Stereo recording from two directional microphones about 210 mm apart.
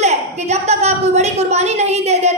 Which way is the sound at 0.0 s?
30° right (ahead or behind).